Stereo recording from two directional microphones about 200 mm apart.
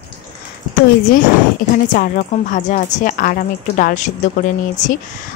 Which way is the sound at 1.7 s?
40° left (ahead or behind).